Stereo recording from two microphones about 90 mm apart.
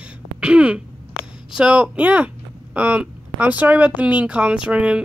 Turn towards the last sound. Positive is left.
turn(degrees=-10)  # may be behind; listen again after turning